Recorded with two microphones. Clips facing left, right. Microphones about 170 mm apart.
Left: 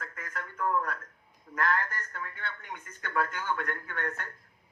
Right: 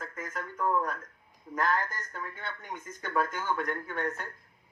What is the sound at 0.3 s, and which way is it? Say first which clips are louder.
Speech: right 1 dB; 15° right (ahead or behind).